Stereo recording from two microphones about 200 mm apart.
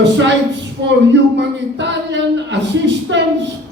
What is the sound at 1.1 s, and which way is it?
Speech, 60° right (ahead or behind).